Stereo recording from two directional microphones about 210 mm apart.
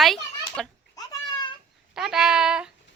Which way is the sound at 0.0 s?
Centre (ahead or behind).